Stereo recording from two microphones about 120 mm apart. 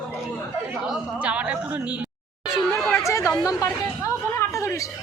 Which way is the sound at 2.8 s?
10° left (ahead or behind).